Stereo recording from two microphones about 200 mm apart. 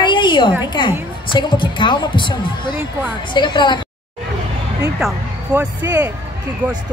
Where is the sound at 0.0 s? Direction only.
25° left (ahead or behind).